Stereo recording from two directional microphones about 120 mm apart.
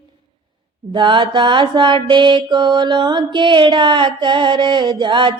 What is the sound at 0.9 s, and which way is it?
Mantra, 40° right (ahead or behind).